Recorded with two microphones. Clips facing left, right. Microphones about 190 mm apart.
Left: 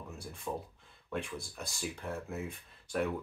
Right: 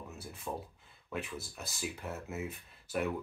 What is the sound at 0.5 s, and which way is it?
Speech, 5° right (ahead or behind).